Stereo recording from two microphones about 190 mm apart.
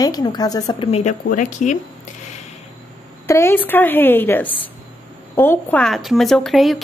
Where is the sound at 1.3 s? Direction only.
40° left (ahead or behind).